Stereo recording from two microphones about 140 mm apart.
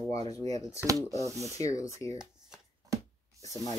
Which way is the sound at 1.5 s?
20° left (ahead or behind).